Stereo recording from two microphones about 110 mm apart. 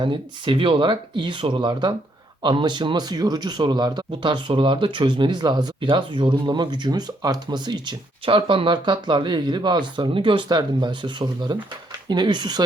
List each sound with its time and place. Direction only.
0.0 s speech: 50° right (ahead or behind)